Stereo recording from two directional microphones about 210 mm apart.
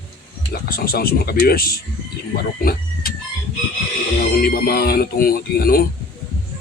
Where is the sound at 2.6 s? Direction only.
45° left (ahead or behind).